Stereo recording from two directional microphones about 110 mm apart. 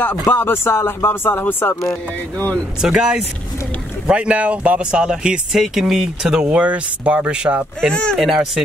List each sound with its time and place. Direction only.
0.0 s speech: 20° left (ahead or behind)
2.8 s speech: 5° right (ahead or behind)
7.9 s speech: 10° left (ahead or behind)
8.2 s speech: 5° right (ahead or behind)